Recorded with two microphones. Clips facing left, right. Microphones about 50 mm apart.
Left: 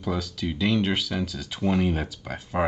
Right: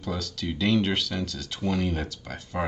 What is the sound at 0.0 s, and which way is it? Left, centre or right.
Speech, centre.